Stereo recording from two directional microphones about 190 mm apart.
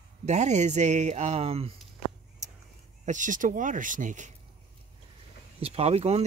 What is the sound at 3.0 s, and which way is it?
Speech, 40° right (ahead or behind).